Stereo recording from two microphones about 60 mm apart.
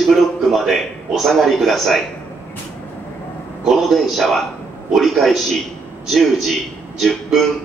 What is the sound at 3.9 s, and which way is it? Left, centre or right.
A woman's voice, centre.